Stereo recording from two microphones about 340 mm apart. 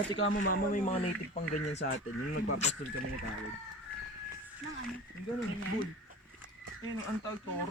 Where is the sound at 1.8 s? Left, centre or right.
Left.